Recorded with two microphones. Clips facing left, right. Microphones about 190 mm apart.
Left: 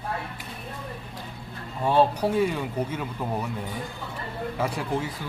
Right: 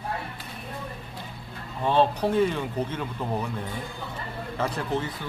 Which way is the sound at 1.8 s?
10° left (ahead or behind).